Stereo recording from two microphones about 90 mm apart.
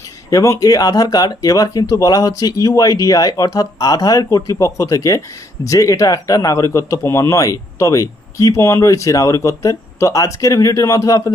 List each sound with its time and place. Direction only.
0.3 s speech: 40° left (ahead or behind)